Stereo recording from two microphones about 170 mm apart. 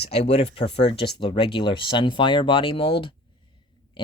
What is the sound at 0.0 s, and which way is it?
Speech, 35° left (ahead or behind).